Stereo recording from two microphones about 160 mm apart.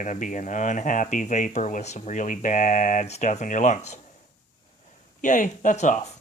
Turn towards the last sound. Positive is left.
turn(degrees=50)  # may be behind; listen again after turning